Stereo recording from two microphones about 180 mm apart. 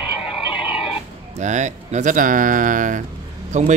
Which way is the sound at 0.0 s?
5° right (ahead or behind).